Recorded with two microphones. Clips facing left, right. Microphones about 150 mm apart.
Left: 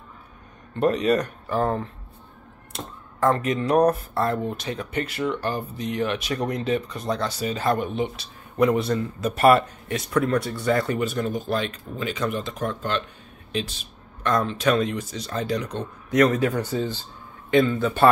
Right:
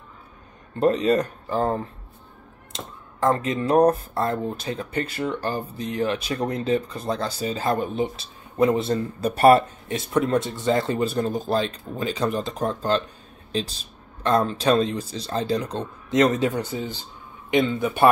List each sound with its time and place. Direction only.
0.7 s speech: 30° right (ahead or behind)